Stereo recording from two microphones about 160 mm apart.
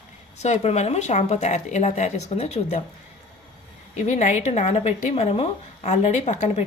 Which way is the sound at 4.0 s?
45° left (ahead or behind).